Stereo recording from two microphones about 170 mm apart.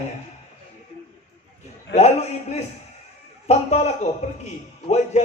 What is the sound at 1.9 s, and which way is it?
A man's voice, 40° left (ahead or behind).